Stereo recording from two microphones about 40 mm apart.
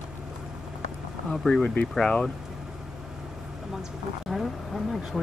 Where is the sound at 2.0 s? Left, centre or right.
Centre.